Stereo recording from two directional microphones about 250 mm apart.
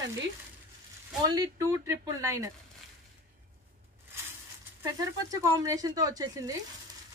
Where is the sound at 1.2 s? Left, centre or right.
Centre.